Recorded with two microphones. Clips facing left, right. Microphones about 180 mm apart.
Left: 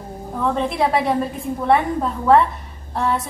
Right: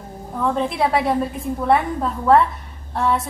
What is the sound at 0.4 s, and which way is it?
Speech, centre (ahead or behind).